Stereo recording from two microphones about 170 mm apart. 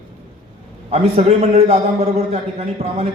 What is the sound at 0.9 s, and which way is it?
A man's voice, 40° right (ahead or behind).